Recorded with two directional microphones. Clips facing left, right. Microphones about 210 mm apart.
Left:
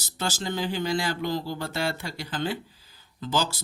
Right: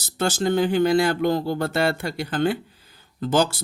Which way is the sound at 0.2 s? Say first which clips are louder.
Right 9 dB; 50° right (ahead or behind).